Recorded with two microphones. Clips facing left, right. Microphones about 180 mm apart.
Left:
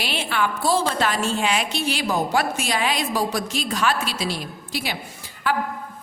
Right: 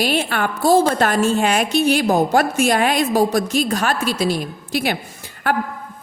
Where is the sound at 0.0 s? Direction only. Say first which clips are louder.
Right 5 dB; 45° right (ahead or behind).